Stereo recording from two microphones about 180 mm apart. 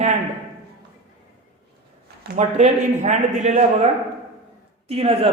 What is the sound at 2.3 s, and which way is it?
A man's voice, 40° right (ahead or behind).